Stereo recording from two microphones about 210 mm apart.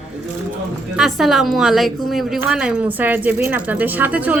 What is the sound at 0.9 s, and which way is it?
A woman's voice, centre (ahead or behind).